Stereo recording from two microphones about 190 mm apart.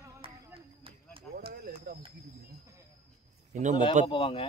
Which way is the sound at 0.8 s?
30° right (ahead or behind).